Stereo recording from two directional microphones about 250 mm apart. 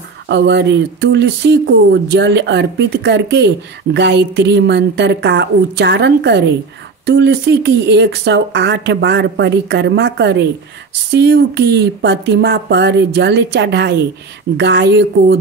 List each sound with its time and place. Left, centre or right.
0.3 s speech: right